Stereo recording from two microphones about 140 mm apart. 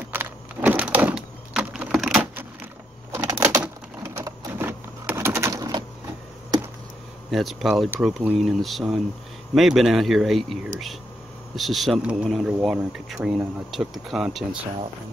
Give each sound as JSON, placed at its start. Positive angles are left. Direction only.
{"t": 0.1, "sound": "power windows", "side_deg": -15}
{"t": 3.1, "sound": "door", "side_deg": -20}
{"t": 4.1, "sound": "printer", "side_deg": -20}
{"t": 7.2, "sound": "speech", "side_deg": 0}